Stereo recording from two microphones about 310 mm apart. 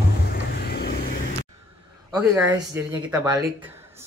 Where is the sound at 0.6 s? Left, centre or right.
Left.